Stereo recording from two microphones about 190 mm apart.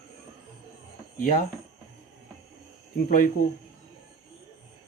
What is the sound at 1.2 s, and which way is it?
Speech, 45° left (ahead or behind).